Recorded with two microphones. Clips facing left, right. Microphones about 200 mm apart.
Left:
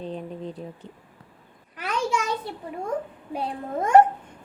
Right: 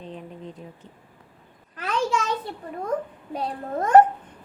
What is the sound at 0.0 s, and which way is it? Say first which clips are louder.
Speech: left 5 dB; 35° left (ahead or behind).